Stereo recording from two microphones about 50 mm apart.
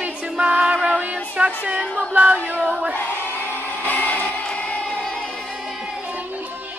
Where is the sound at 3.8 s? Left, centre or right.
Left.